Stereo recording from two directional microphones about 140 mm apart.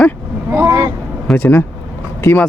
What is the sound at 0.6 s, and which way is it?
Speech, 20° right (ahead or behind).